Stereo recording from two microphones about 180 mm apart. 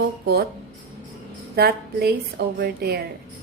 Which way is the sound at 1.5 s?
60° right (ahead or behind).